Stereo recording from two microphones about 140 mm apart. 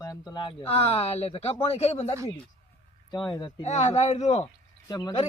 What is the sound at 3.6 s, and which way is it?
Speech, 55° left (ahead or behind).